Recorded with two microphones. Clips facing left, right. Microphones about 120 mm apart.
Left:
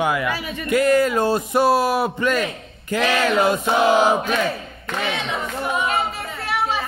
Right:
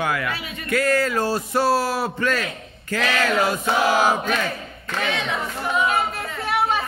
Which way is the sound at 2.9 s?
15° left (ahead or behind).